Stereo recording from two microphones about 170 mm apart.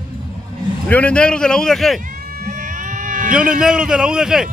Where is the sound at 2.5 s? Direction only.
50° right (ahead or behind).